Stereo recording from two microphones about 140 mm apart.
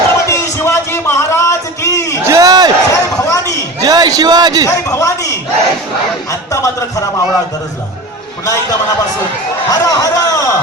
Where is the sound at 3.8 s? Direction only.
30° right (ahead or behind).